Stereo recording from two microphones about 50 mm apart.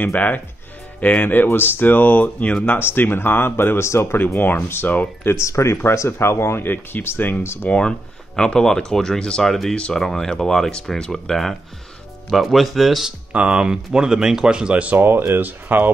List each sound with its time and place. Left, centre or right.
0.0 s speech: left
2.8 s speech: left
4.4 s speech: left
5.2 s speech: left
5.8 s speech: left
7.7 s speech: left
8.4 s speech: centre
13.3 s speech: right
15.0 s speech: right